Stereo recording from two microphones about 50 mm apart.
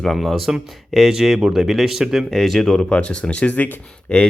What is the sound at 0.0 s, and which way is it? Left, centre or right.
Speech, centre.